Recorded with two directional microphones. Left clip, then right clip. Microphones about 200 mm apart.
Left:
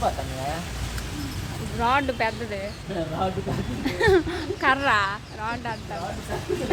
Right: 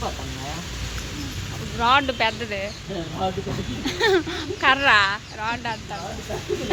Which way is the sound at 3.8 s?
10° left (ahead or behind).